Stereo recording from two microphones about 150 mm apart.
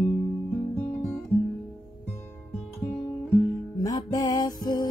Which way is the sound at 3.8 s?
25° left (ahead or behind).